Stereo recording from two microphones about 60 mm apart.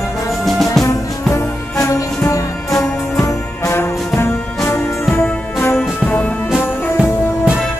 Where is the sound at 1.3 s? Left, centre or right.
Left.